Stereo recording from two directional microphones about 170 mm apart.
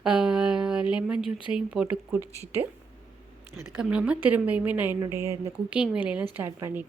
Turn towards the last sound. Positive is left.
turn(degrees=-10)  # may be behind; listen again after turning